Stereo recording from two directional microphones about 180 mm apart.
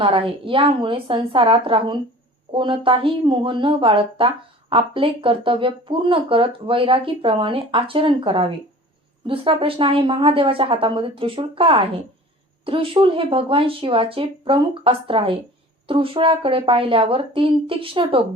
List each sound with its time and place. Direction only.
0.0 s speech: 30° right (ahead or behind)